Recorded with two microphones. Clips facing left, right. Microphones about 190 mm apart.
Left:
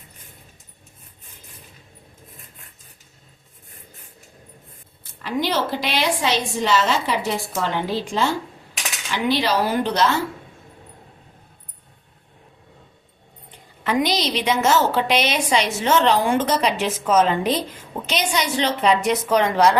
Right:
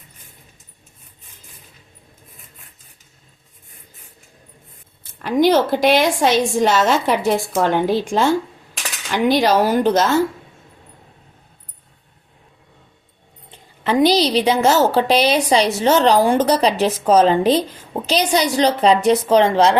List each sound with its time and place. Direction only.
5.2 s a woman's voice: 50° right (ahead or behind)
13.8 s a woman's voice: 30° right (ahead or behind)